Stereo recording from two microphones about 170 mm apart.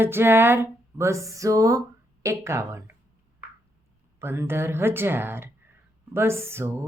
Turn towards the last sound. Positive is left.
turn(degrees=-15)  # may be behind; listen again after turning